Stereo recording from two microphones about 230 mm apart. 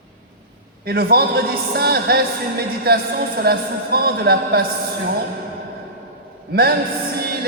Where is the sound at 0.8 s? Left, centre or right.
Right.